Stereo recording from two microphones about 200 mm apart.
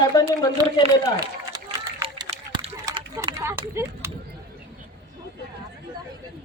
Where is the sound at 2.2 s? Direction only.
25° right (ahead or behind).